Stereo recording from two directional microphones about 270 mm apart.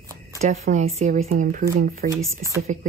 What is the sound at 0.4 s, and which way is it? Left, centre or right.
Speech, right.